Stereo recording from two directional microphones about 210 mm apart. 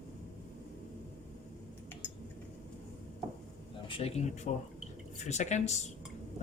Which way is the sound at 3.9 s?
30° left (ahead or behind).